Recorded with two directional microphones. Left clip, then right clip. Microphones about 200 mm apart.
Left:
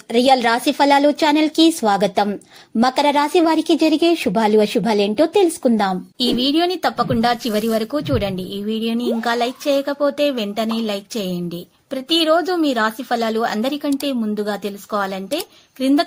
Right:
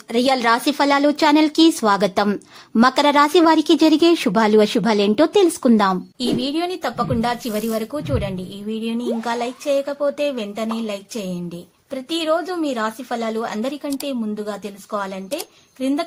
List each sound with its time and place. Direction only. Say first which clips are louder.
0.1 s a woman's voice: left 2 dB; centre (ahead or behind)
6.4 s speech: left 5 dB; 20° left (ahead or behind)